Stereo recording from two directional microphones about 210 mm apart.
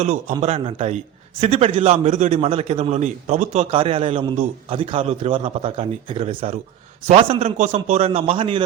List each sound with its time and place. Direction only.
0.0 s a man's voice: 35° right (ahead or behind)